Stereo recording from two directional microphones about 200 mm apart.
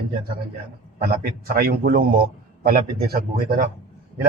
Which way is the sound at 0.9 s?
50° right (ahead or behind).